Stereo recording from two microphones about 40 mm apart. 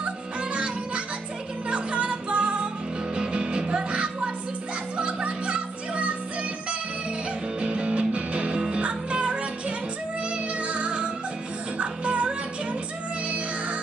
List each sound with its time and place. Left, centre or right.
0.4 s music: right
7.6 s music: right
8.5 s music: centre
8.8 s music: right